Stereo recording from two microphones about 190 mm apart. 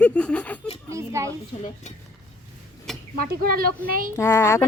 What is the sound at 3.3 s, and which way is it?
Speech, 50° right (ahead or behind).